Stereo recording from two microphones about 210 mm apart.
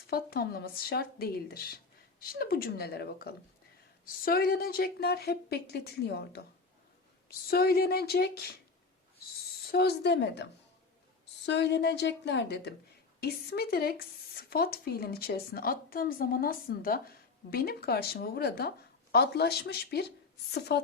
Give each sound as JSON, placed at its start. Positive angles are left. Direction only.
{"t": 0.1, "sound": "a woman's voice", "side_deg": 45}
{"t": 9.6, "sound": "a woman's voice", "side_deg": 50}
{"t": 11.4, "sound": "a woman's voice", "side_deg": 55}